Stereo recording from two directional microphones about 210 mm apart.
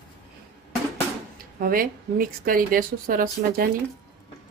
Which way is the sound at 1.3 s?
45° right (ahead or behind).